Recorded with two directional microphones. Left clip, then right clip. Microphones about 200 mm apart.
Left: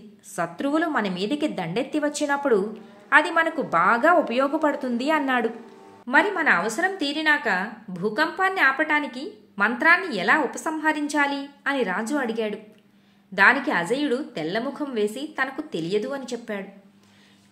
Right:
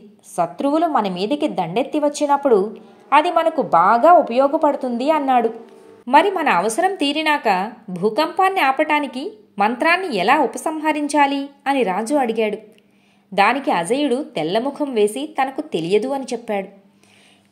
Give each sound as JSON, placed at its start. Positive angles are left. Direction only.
{"t": 0.4, "sound": "a woman's voice", "side_deg": -10}
{"t": 0.7, "sound": "a woman's voice", "side_deg": 20}
{"t": 1.0, "sound": "a woman's voice", "side_deg": -10}
{"t": 2.2, "sound": "a woman's voice", "side_deg": 20}
{"t": 3.2, "sound": "a woman's voice", "side_deg": -10}
{"t": 6.0, "sound": "a woman's voice", "side_deg": -25}